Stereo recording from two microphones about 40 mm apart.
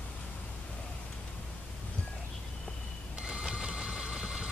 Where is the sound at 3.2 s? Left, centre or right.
Right.